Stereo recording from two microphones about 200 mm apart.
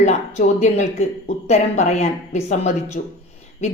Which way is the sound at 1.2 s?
35° left (ahead or behind).